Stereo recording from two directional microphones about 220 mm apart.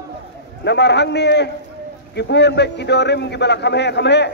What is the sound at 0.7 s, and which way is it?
A man's voice, 50° left (ahead or behind).